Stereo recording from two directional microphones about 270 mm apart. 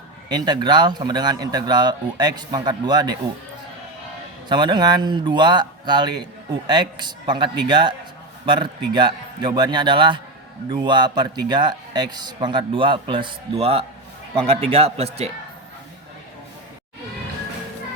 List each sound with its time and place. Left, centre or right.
0.3 s speech: centre
4.4 s a man's voice: centre